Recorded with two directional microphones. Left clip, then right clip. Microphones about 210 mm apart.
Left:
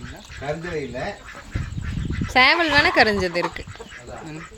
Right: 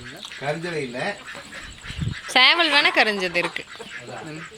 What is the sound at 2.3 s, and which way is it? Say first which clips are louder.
Speech: even; 10° left (ahead or behind).